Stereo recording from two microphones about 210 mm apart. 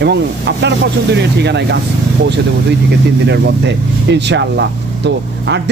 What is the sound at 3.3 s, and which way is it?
Speech, 55° right (ahead or behind).